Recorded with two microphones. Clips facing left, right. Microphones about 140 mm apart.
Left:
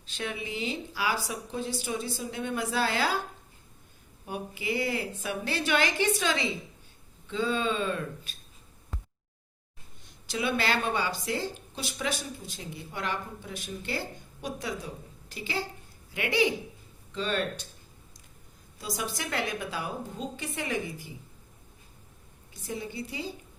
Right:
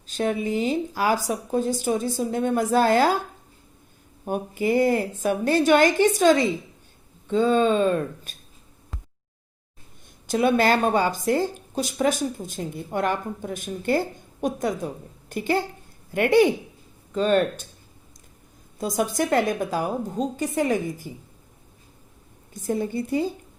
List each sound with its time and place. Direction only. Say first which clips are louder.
0.1 s speech: right 11 dB; 45° right (ahead or behind)
4.3 s speech: right 10 dB; 45° right (ahead or behind)
10.2 s speech: right 9 dB; 45° right (ahead or behind)
18.8 s speech: right 11 dB; 50° right (ahead or behind)
22.5 s speech: right 10 dB; 50° right (ahead or behind)